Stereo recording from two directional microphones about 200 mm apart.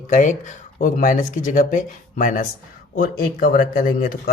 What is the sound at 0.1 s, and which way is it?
Speech, 35° left (ahead or behind).